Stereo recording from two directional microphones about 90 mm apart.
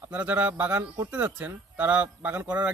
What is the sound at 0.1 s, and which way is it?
Speech, 20° right (ahead or behind).